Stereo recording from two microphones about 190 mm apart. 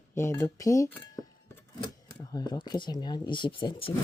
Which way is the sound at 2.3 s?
20° left (ahead or behind).